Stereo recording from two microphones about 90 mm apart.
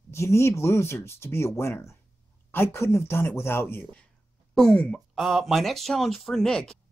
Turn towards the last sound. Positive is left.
turn(degrees=5)  # may be behind; listen again after turning